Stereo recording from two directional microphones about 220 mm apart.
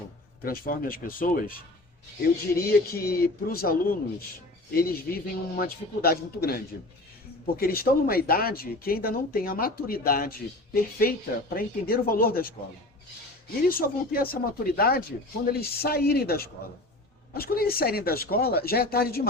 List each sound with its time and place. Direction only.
0.4 s speech: 40° left (ahead or behind)
2.6 s speech: 45° left (ahead or behind)
13.7 s speech: 40° left (ahead or behind)